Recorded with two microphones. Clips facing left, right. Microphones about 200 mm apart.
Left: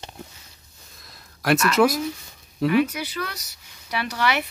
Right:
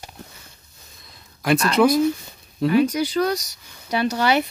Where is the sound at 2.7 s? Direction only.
30° right (ahead or behind).